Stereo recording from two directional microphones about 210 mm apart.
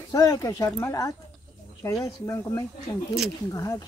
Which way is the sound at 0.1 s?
15° left (ahead or behind).